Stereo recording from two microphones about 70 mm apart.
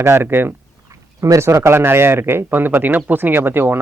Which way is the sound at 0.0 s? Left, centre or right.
Right.